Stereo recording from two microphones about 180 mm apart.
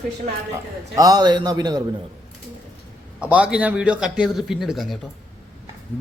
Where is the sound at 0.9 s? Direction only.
20° right (ahead or behind).